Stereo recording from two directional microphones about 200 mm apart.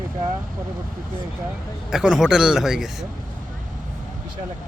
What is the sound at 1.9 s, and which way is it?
A man's voice, 5° right (ahead or behind).